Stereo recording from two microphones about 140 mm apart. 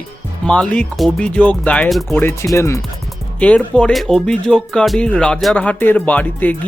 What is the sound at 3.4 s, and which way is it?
Speech, 10° left (ahead or behind).